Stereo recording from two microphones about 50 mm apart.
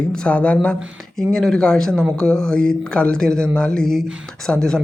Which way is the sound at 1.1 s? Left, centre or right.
Centre.